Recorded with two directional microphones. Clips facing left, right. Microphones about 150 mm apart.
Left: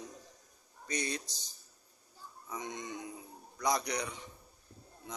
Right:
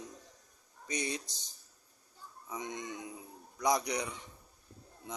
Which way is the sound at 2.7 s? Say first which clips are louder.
Right 1 dB; 35° left (ahead or behind).